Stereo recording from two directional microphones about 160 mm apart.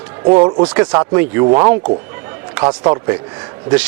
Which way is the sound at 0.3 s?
30° right (ahead or behind).